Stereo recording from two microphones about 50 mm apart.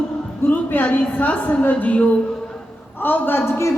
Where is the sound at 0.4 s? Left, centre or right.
Left.